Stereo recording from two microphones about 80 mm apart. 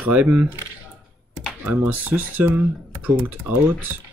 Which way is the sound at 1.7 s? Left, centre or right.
Right.